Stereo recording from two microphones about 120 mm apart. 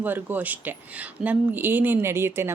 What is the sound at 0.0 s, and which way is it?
A woman's voice, 15° right (ahead or behind).